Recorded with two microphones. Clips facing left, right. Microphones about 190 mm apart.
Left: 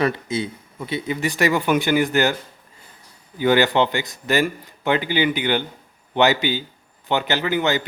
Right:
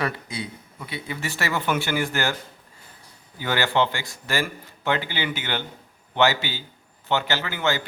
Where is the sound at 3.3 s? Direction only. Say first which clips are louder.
Left 6 dB; 15° left (ahead or behind).